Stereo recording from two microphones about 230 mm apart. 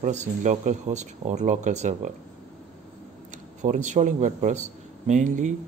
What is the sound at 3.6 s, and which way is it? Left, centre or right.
A man's voice, right.